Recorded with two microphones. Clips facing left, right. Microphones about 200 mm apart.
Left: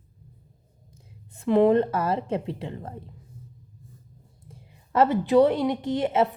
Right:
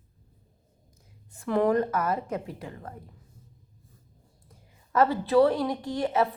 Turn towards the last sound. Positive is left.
turn(degrees=25)  # may be behind; listen again after turning